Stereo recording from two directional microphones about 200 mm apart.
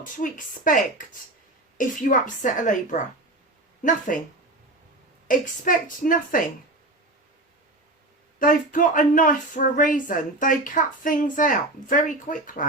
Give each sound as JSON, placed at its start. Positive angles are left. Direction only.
{"t": 0.0, "sound": "speech", "side_deg": 40}
{"t": 1.8, "sound": "speech", "side_deg": 40}
{"t": 5.3, "sound": "a woman's voice", "side_deg": 45}
{"t": 8.4, "sound": "speech", "side_deg": 45}